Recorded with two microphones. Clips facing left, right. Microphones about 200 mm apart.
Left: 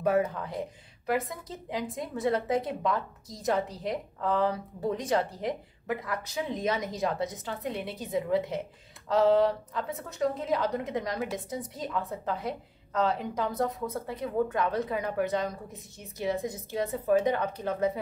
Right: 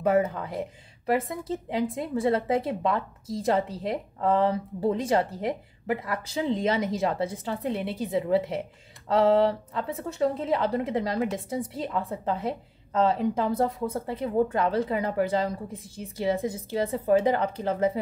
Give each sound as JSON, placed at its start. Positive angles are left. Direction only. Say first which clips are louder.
{"t": 0.0, "sound": "a woman's voice", "louder": "right 3 dB", "side_deg": -25}
{"t": 1.8, "sound": "a woman's voice", "louder": "right 5 dB", "side_deg": -25}
{"t": 9.9, "sound": "a woman's voice", "louder": "right 4 dB", "side_deg": -30}